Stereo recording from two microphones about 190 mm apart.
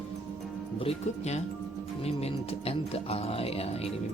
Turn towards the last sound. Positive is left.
turn(degrees=30)  # may be behind; listen again after turning